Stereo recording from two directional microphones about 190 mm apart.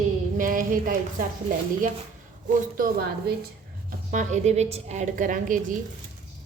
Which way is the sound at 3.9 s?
40° right (ahead or behind).